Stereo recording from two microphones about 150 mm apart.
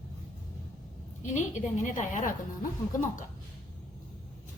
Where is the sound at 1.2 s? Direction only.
55° left (ahead or behind).